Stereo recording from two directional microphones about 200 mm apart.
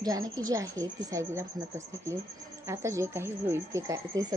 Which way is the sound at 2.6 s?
15° right (ahead or behind).